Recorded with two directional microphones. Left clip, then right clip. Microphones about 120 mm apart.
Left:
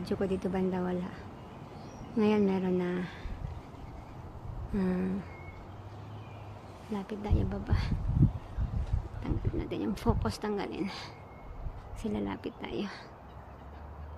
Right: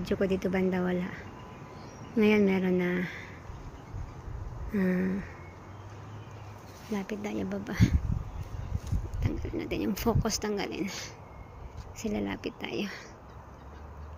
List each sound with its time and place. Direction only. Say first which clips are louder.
0.0 s speech: right 3 dB; 20° right (ahead or behind)
4.7 s speech: right 3 dB; 20° right (ahead or behind)
6.9 s speech: right 2 dB; 20° right (ahead or behind)
9.2 s speech: right 2 dB; 15° right (ahead or behind)